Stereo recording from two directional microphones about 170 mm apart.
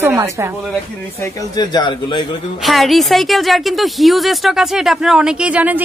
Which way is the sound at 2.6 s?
Centre (ahead or behind).